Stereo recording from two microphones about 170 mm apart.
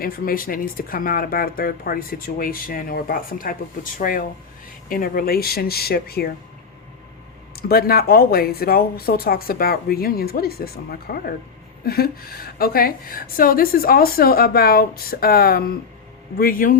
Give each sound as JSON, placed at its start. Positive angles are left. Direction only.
{"t": 0.0, "sound": "a woman's voice", "side_deg": 55}
{"t": 7.5, "sound": "a woman's voice", "side_deg": 60}